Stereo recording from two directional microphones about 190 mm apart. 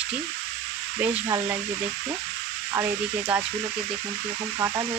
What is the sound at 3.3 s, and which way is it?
Speech, 5° right (ahead or behind).